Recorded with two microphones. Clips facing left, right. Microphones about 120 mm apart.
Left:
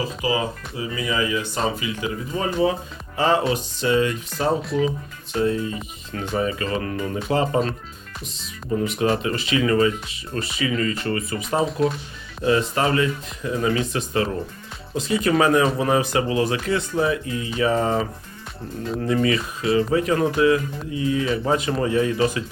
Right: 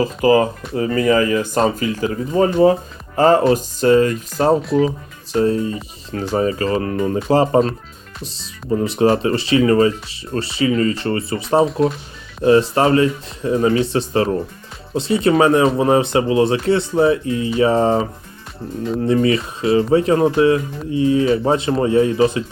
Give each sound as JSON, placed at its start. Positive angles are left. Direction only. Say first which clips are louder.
{"t": 0.2, "sound": "speech", "louder": "right 12 dB", "side_deg": -50}
{"t": 5.3, "sound": "speech", "louder": "right 5 dB", "side_deg": -35}
{"t": 8.8, "sound": "speech", "louder": "right 7 dB", "side_deg": -30}
{"t": 11.6, "sound": "speech", "louder": "right 5 dB", "side_deg": 0}
{"t": 12.5, "sound": "speech", "louder": "right 7 dB", "side_deg": -30}